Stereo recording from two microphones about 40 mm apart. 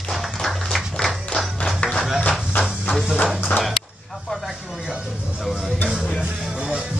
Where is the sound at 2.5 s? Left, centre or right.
Left.